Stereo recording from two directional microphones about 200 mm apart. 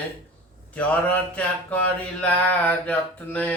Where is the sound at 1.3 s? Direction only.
5° left (ahead or behind).